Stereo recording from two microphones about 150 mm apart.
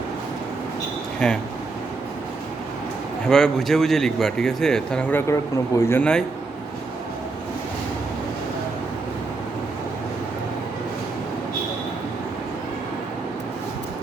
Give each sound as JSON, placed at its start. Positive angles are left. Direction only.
{"t": 1.2, "sound": "speech", "side_deg": 5}
{"t": 3.2, "sound": "speech", "side_deg": 5}
{"t": 5.3, "sound": "speech", "side_deg": 20}
{"t": 6.0, "sound": "speech", "side_deg": 5}